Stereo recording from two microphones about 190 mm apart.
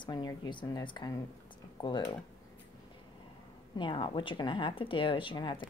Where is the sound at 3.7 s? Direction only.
25° left (ahead or behind).